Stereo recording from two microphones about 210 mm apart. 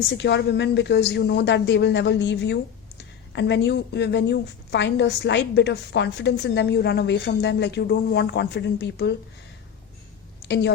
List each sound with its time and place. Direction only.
0.1 s a woman's voice: 55° left (ahead or behind)